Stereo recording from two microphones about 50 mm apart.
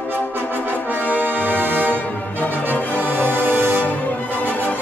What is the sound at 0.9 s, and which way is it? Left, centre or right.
Brass instrument, right.